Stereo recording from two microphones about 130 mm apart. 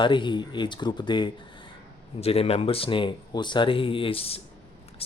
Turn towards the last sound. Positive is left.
turn(degrees=50)  # may be behind; listen again after turning